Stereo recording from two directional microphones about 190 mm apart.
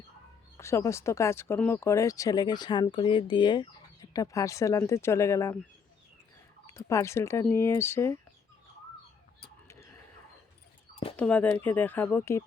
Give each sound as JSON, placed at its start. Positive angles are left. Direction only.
{"t": 0.5, "sound": "speech", "side_deg": 15}
{"t": 6.7, "sound": "speech", "side_deg": 15}
{"t": 11.2, "sound": "speech", "side_deg": 5}